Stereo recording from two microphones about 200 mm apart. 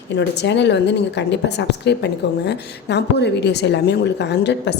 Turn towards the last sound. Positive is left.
turn(degrees=60)  # may be behind; listen again after turning